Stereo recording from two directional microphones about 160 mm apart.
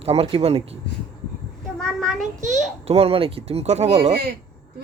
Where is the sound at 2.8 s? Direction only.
40° right (ahead or behind).